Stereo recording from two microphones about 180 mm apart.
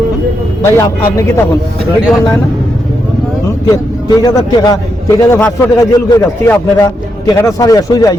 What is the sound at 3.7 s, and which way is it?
A man's voice, 20° left (ahead or behind).